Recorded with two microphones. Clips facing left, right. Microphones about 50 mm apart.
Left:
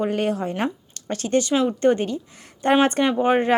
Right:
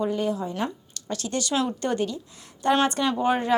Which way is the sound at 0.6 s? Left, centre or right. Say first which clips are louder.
Left 4 dB; left.